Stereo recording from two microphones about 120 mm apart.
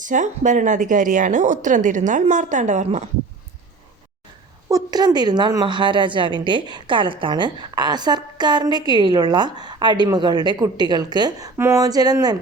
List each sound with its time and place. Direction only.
0.0 s a woman's voice: 90° right
4.7 s a woman's voice: 35° right (ahead or behind)